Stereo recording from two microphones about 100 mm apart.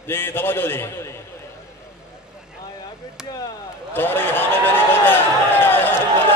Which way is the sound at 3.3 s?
40° left (ahead or behind).